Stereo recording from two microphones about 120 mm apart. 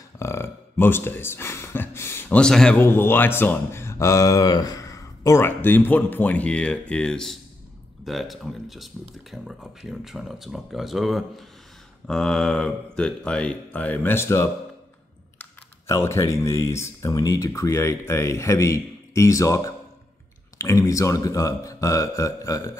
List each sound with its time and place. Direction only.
0.2 s a sound: 20° left (ahead or behind); by 2.8 s 5° left (ahead or behind)
2.8 s speech: 20° left (ahead or behind)
15.9 s speech: 25° left (ahead or behind)